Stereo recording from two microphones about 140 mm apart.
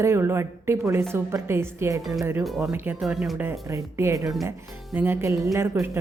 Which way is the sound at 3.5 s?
20° right (ahead or behind).